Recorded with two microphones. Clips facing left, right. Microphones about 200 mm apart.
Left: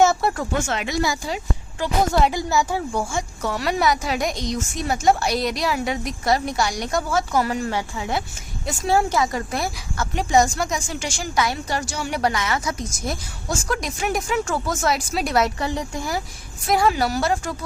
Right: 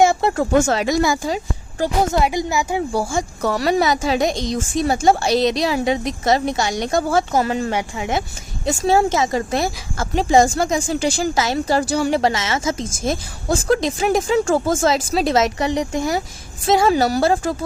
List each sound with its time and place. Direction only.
0.0 s speech: 15° right (ahead or behind)
0.5 s speech: 40° right (ahead or behind)
2.2 s speech: 15° right (ahead or behind)
2.9 s a woman's voice: 35° right (ahead or behind)